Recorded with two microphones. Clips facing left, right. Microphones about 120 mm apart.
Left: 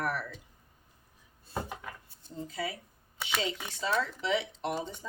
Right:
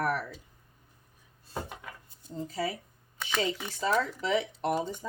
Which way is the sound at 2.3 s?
35° right (ahead or behind).